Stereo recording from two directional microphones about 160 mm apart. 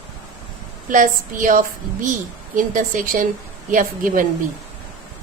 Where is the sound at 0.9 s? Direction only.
55° right (ahead or behind).